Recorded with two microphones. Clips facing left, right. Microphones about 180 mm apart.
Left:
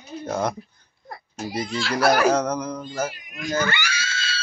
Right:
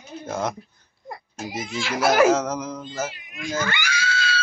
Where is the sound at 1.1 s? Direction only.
20° right (ahead or behind).